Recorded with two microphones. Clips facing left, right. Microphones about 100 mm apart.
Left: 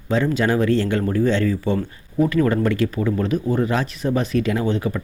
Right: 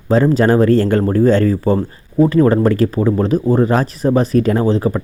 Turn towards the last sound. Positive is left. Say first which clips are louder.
# right 7 dB
turn(degrees=-35)  # may be behind; listen again after turning